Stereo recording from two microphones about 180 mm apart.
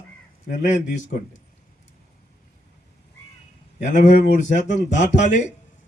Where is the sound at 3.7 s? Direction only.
40° left (ahead or behind).